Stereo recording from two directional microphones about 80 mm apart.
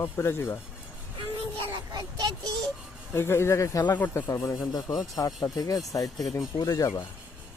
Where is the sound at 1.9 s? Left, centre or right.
Right.